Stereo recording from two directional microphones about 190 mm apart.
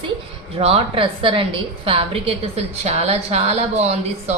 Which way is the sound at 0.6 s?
30° right (ahead or behind).